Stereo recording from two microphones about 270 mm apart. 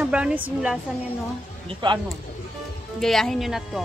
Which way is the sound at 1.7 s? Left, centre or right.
Centre.